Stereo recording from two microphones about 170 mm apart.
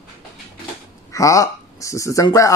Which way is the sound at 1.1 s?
20° left (ahead or behind).